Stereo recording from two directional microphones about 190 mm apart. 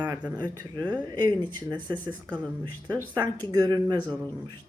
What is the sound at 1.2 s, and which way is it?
Speech, 25° right (ahead or behind).